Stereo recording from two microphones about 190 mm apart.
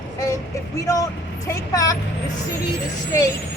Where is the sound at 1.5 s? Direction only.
15° left (ahead or behind).